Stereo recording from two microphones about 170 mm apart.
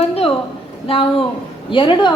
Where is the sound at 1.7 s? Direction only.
30° left (ahead or behind).